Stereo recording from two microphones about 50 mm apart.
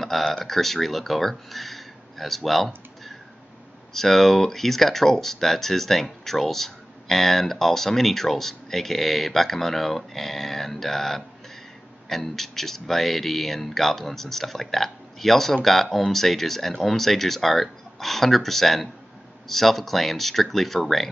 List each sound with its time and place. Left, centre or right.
0.0 s speech: centre